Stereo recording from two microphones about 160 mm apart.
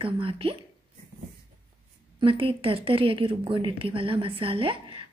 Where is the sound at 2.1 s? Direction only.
35° right (ahead or behind).